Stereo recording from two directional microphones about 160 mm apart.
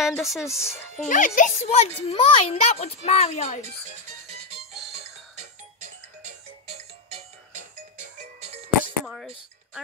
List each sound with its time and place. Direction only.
0.0 s speech: centre (ahead or behind)
1.0 s a child's voice: 55° left (ahead or behind)
4.9 s music: 45° right (ahead or behind)
9.0 s a sound: centre (ahead or behind)